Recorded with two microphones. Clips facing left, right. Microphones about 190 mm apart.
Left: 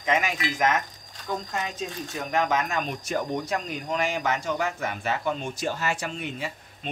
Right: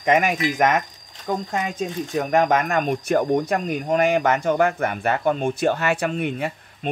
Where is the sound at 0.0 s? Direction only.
55° right (ahead or behind).